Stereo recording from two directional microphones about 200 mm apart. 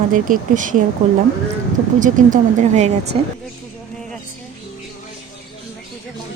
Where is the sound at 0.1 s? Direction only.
40° right (ahead or behind).